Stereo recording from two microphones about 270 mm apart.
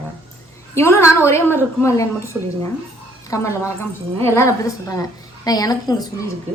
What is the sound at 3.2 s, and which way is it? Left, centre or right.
A woman's voice, centre.